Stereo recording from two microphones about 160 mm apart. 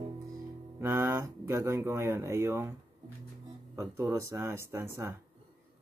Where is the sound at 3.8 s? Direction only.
20° right (ahead or behind).